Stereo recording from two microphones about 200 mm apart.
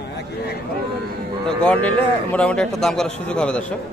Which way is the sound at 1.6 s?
5° left (ahead or behind).